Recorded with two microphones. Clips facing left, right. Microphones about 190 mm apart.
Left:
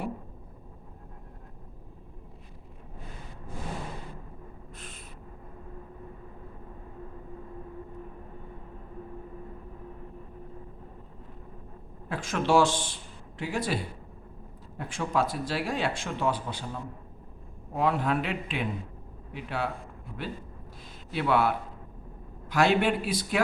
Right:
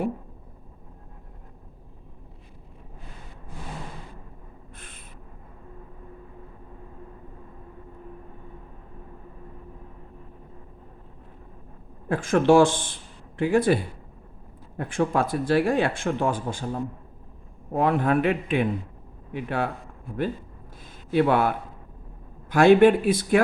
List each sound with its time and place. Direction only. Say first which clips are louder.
12.0 s speech: right 9 dB; 50° right (ahead or behind)
14.8 s speech: right 5 dB; 55° right (ahead or behind)
21.1 s speech: right 5 dB; 50° right (ahead or behind)